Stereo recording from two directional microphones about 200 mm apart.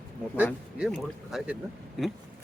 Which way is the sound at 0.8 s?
5° right (ahead or behind).